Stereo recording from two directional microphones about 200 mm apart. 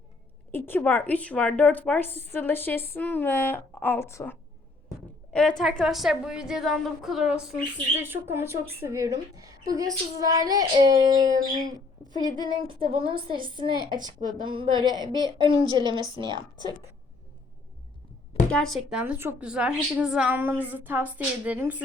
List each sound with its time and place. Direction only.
0.5 s a woman's voice: 10° left (ahead or behind); by 11.3 s 20° right (ahead or behind)
11.3 s speech: 40° right (ahead or behind)
12.1 s a woman's voice: 20° right (ahead or behind)
18.5 s a woman's voice: centre (ahead or behind)